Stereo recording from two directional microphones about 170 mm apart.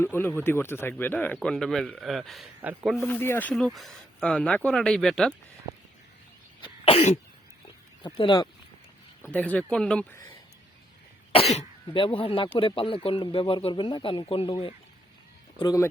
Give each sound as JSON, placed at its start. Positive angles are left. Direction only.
{"t": 0.0, "sound": "speech", "side_deg": 10}
{"t": 3.0, "sound": "speech", "side_deg": 10}
{"t": 6.6, "sound": "cough", "side_deg": 35}
{"t": 8.0, "sound": "speech", "side_deg": 30}
{"t": 9.2, "sound": "speech", "side_deg": 10}
{"t": 11.3, "sound": "speech", "side_deg": 35}
{"t": 15.5, "sound": "speech", "side_deg": 20}